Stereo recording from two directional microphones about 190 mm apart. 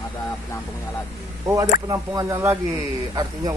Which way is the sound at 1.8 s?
20° right (ahead or behind).